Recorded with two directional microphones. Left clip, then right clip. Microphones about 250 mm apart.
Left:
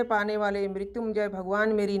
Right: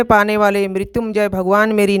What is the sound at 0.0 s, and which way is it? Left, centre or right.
Speech, right.